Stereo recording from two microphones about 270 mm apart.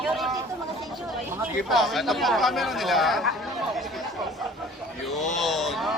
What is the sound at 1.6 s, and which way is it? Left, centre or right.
Speech, centre.